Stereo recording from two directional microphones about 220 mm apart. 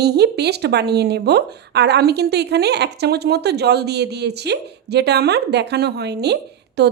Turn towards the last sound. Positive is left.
turn(degrees=-50)  # may be behind; listen again after turning